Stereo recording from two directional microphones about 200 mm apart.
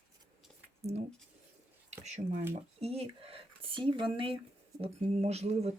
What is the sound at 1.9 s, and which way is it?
Speech, 35° right (ahead or behind).